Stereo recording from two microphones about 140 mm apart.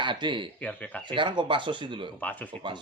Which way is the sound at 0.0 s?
35° right (ahead or behind).